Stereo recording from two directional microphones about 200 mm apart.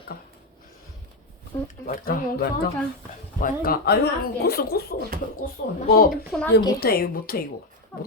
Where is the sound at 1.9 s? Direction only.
45° left (ahead or behind).